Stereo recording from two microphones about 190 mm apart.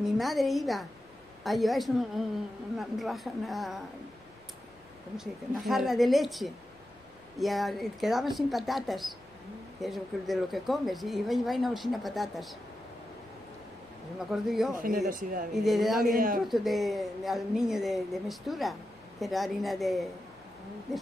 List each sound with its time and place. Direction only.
0.0 s a woman's voice: centre (ahead or behind)
5.1 s a woman's voice: centre (ahead or behind)
14.3 s a woman's voice: centre (ahead or behind)
15.0 s a man's voice: 45° right (ahead or behind)
15.5 s a woman's voice: centre (ahead or behind)
16.0 s a man's voice: 45° right (ahead or behind)
16.4 s a woman's voice: centre (ahead or behind)